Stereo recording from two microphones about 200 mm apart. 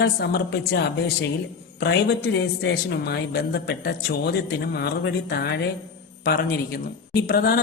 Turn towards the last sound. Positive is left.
turn(degrees=50)  # may be behind; listen again after turning